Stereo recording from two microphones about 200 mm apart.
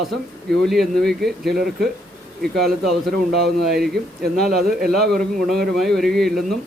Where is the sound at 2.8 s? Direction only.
Centre (ahead or behind).